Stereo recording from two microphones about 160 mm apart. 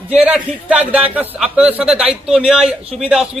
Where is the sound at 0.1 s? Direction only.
10° right (ahead or behind).